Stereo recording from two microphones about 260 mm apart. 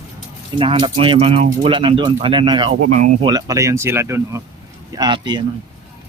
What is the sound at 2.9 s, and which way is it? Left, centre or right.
Speech, right.